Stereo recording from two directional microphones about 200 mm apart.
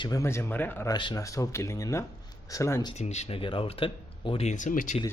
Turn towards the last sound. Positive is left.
turn(degrees=40)  # may be behind; listen again after turning